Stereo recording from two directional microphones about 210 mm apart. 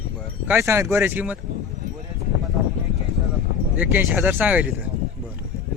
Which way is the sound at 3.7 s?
10° right (ahead or behind).